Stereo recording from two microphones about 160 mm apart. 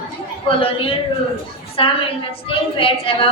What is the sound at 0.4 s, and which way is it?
A man's voice, 35° left (ahead or behind).